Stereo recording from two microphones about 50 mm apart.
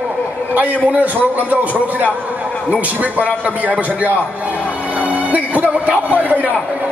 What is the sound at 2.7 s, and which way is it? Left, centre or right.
A man's voice, right.